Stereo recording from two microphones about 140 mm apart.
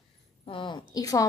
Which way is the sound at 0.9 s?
25° left (ahead or behind).